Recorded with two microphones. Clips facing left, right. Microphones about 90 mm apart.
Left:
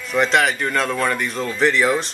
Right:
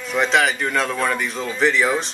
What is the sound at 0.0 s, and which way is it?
Speech, centre (ahead or behind).